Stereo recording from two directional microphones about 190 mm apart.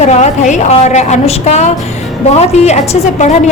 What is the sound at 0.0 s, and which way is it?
A woman's voice, 35° left (ahead or behind).